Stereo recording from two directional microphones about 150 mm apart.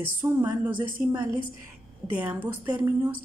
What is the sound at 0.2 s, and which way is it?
A woman's voice, 15° right (ahead or behind).